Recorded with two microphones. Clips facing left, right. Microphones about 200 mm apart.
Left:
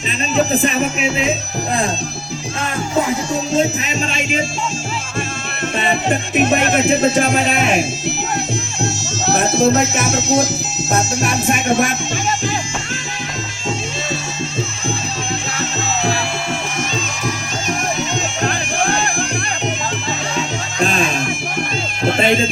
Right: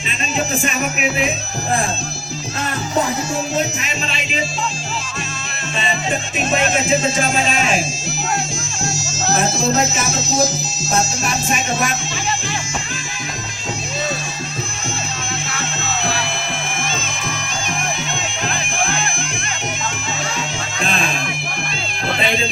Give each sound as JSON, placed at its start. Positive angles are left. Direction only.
{"t": 0.3, "sound": "music", "side_deg": 35}
{"t": 4.1, "sound": "music", "side_deg": 45}
{"t": 5.8, "sound": "music", "side_deg": 60}
{"t": 8.8, "sound": "speech", "side_deg": 65}
{"t": 18.4, "sound": "music", "side_deg": 40}
{"t": 20.7, "sound": "music", "side_deg": 40}